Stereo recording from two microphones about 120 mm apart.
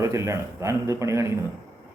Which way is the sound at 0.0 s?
25° right (ahead or behind).